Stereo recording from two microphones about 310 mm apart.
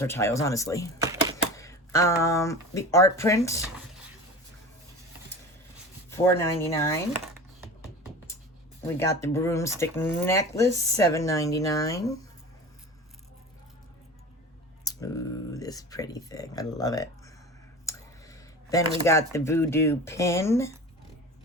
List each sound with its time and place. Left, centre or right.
0.0 s speech: centre
6.1 s rub: centre
9.0 s speech: centre
14.8 s speech: centre
17.8 s clicking: centre
19.0 s speech: centre